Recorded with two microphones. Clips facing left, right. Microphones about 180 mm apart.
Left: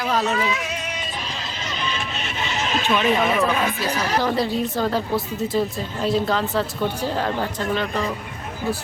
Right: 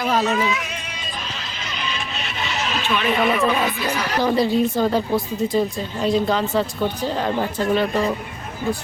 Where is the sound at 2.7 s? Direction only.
40° left (ahead or behind).